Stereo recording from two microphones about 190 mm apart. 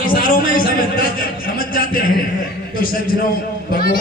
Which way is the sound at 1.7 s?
50° left (ahead or behind).